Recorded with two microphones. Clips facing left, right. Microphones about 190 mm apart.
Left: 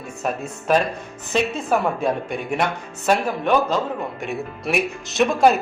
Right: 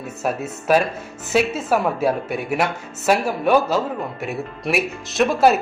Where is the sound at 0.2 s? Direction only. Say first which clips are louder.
Right 2 dB; 5° right (ahead or behind).